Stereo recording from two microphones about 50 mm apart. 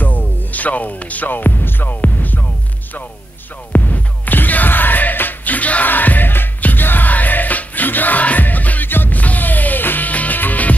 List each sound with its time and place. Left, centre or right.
0.0 s music: left
3.7 s music: left